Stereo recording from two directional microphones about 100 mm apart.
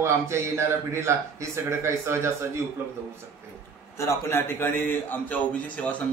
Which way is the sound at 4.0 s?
25° left (ahead or behind).